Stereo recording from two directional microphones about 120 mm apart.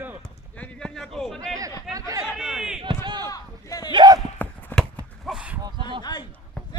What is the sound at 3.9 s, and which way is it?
Basketball bounce, 35° right (ahead or behind).